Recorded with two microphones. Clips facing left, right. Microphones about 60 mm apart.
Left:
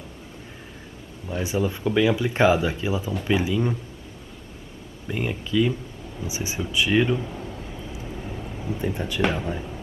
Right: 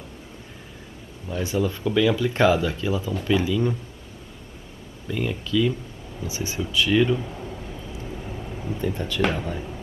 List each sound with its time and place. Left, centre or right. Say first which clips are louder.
1.3 s speech: even; centre
5.0 s speech: right 1 dB; left
7.2 s a sound: left 1 dB; centre
8.1 s vehicle: even; centre
8.7 s speech: right 1 dB; centre
9.2 s speech: even; centre